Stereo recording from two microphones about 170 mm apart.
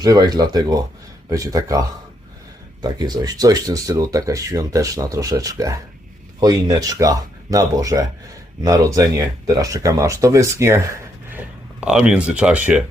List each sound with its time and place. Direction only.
0.0 s speech: 20° right (ahead or behind)
2.8 s speech: 25° right (ahead or behind); by 12.8 s 5° right (ahead or behind)